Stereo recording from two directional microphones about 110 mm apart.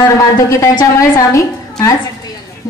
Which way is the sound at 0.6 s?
30° left (ahead or behind).